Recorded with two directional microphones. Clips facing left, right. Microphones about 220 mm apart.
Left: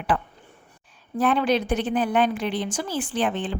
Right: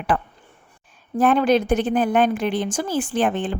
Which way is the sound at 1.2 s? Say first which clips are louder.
Right 4 dB; 45° right (ahead or behind).